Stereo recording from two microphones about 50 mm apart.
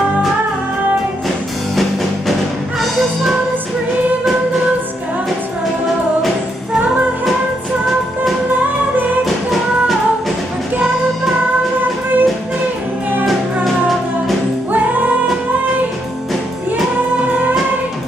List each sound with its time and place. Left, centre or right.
2.8 s music: centre
9.2 s music: centre
11.8 s music: right